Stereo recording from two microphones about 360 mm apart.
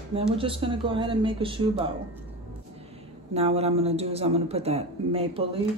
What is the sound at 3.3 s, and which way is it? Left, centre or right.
A man's voice, centre.